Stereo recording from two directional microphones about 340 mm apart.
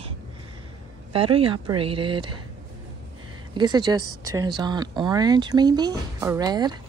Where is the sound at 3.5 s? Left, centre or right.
Centre.